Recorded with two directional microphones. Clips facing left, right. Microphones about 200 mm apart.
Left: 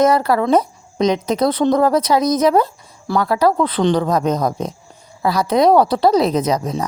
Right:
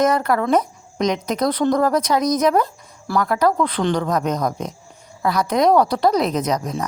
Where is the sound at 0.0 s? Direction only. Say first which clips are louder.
Left 3 dB; 30° left (ahead or behind).